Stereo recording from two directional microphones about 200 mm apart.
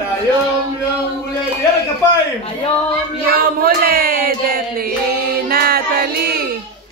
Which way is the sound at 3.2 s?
45° right (ahead or behind).